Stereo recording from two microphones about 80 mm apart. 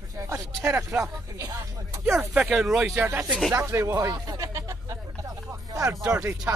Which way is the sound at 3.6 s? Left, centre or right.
Right.